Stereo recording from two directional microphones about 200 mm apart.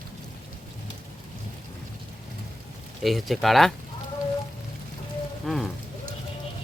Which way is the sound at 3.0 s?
Centre (ahead or behind).